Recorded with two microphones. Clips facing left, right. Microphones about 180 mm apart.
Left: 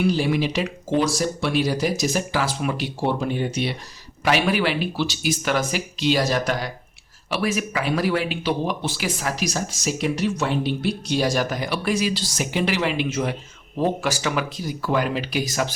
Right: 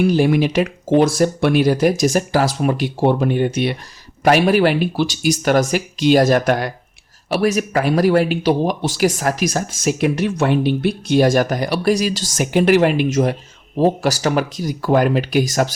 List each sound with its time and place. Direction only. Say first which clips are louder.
0.0 s speech: right 6 dB; 50° right (ahead or behind)
4.2 s speech: right 7 dB; 45° right (ahead or behind)
7.3 s speech: right 6 dB; 40° right (ahead or behind)